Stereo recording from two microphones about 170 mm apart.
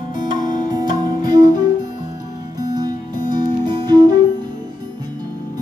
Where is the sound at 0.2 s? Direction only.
50° left (ahead or behind).